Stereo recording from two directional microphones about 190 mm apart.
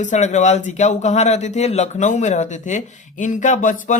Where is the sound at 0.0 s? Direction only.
40° left (ahead or behind).